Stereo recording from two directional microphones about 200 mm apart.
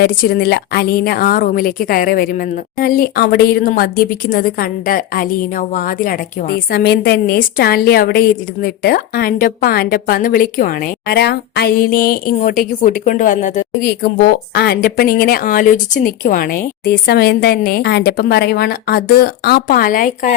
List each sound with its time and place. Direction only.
0.0 s speech: 50° left (ahead or behind)
14.5 s speech: 50° left (ahead or behind)